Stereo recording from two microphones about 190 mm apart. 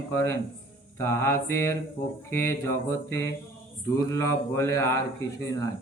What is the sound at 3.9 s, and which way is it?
Speech, 15° left (ahead or behind).